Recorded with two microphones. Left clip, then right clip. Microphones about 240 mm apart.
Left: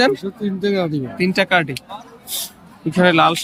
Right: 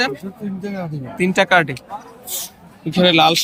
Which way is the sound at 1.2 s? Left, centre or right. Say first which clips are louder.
Right 2 dB; centre.